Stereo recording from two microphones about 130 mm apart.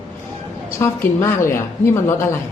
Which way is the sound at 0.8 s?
20° left (ahead or behind).